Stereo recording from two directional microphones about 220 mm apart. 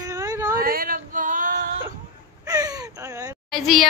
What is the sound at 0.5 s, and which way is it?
Female singing, 40° right (ahead or behind).